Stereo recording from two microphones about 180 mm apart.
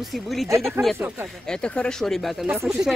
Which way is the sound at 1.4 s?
5° left (ahead or behind).